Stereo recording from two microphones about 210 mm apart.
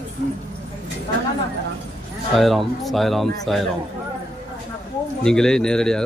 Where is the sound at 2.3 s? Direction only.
Centre (ahead or behind).